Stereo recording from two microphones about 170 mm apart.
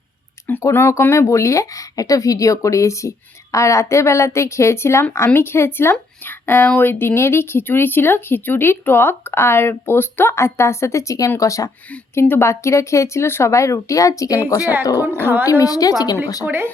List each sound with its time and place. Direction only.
0.4 s a woman's voice: 10° left (ahead or behind)
14.9 s speech: 15° right (ahead or behind)
15.6 s a woman's voice: 20° left (ahead or behind)